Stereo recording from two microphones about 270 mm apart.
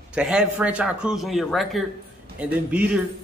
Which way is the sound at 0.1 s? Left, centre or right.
Centre.